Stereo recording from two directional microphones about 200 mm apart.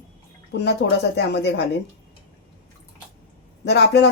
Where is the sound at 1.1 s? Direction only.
60° left (ahead or behind).